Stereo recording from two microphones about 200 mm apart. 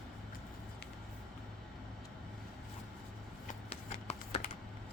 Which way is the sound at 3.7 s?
30° left (ahead or behind).